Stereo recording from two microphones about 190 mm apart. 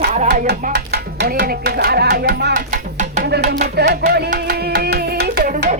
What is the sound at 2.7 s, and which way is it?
Music, 40° right (ahead or behind).